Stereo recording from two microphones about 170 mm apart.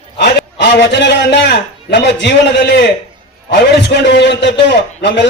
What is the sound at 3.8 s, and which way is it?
A man's voice, 90° left.